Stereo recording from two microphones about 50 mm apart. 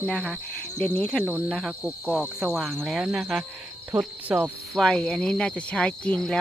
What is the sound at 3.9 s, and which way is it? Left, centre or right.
Cricket, right.